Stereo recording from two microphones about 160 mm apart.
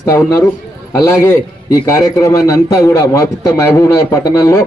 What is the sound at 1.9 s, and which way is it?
A man's voice, 20° left (ahead or behind).